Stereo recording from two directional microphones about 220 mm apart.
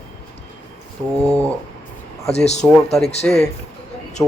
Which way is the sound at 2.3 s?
30° left (ahead or behind).